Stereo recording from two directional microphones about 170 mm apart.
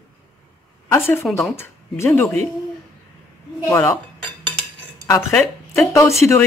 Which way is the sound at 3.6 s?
15° left (ahead or behind).